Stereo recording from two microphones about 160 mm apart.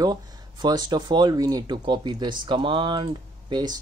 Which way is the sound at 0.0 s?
25° right (ahead or behind).